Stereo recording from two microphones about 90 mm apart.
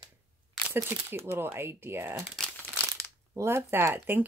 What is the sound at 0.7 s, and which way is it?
Speech, 25° right (ahead or behind).